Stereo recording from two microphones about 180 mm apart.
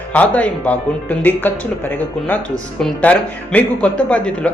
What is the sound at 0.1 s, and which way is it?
Speech, 10° left (ahead or behind).